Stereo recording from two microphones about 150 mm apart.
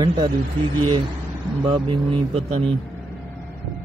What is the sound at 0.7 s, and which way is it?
Speech, 35° right (ahead or behind).